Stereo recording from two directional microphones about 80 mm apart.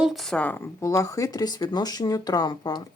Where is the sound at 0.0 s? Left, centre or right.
Centre.